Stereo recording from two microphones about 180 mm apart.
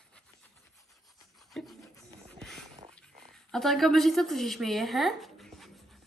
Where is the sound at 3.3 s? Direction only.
Centre (ahead or behind).